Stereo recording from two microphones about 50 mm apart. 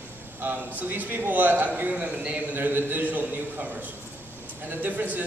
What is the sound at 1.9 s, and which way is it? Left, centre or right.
A man's voice, right.